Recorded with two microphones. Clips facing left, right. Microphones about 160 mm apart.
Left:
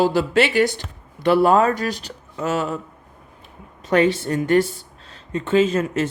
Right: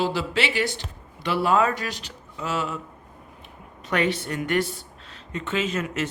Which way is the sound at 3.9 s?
35° left (ahead or behind).